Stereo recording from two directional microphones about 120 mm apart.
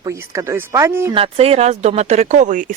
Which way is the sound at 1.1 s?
55° right (ahead or behind).